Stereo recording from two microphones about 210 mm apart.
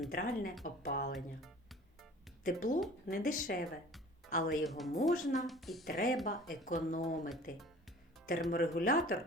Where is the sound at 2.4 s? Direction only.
40° left (ahead or behind).